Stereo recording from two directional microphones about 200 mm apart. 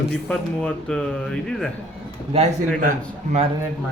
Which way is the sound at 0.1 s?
5° left (ahead or behind).